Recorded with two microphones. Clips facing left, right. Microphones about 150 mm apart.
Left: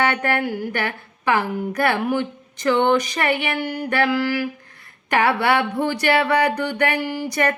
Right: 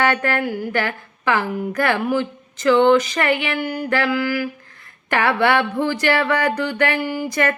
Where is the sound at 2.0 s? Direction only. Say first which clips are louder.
Right 1 dB; 20° left (ahead or behind).